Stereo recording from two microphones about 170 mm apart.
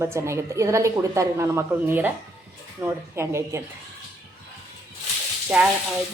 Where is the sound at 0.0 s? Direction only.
15° right (ahead or behind).